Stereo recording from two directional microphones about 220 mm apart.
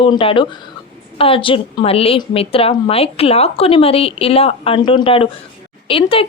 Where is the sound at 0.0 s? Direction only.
25° left (ahead or behind).